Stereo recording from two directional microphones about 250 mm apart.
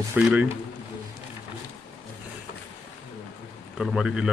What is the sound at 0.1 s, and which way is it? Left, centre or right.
Speech, centre.